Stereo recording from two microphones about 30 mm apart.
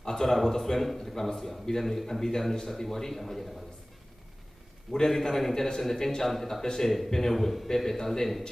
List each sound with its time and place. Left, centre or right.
0.2 s speech: centre
4.9 s speech: centre
7.3 s a man's voice: centre